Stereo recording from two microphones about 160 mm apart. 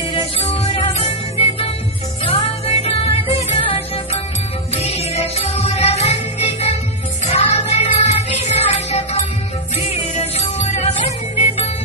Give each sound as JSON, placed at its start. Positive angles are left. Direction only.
{"t": 0.1, "sound": "music", "side_deg": 35}
{"t": 7.2, "sound": "music", "side_deg": 40}